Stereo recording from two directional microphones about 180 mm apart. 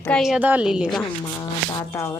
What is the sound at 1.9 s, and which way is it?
Speech, 15° left (ahead or behind).